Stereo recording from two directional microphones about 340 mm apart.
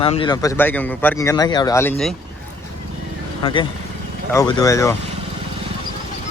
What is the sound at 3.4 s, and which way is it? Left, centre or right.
Speech, centre.